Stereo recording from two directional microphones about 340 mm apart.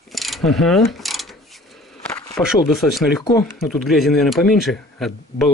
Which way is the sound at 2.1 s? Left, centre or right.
Centre.